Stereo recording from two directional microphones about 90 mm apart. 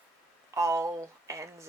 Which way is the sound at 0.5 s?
35° right (ahead or behind).